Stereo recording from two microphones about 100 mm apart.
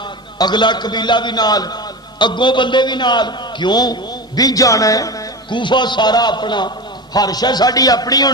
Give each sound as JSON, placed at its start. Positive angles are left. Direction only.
{"t": 0.3, "sound": "a man's voice", "side_deg": 45}
{"t": 5.5, "sound": "a man's voice", "side_deg": 50}